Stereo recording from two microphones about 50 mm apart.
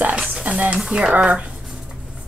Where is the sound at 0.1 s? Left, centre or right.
Right.